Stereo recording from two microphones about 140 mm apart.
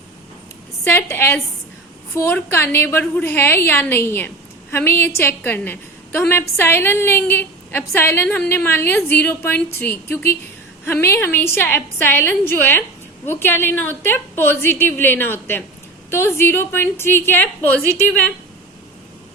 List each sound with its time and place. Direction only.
0.9 s a woman's voice: 15° left (ahead or behind)